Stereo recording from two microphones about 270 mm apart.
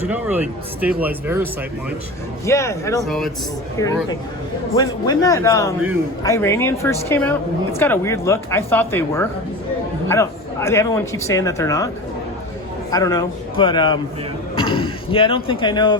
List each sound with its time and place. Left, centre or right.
0.0 s speech: centre
2.5 s a man's voice: centre
4.7 s speech: centre
12.9 s speech: centre